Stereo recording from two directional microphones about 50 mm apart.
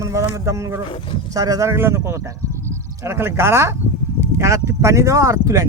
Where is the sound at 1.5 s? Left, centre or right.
Right.